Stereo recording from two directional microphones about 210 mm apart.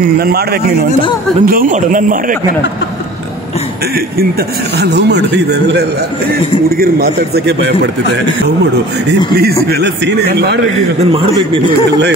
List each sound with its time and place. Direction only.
0.2 s a man's voice: 45° right (ahead or behind)
4.7 s speech: 55° right (ahead or behind)
6.8 s a man's voice: 50° right (ahead or behind)
9.3 s a man's voice: 50° right (ahead or behind)
11.0 s a man's voice: 25° right (ahead or behind)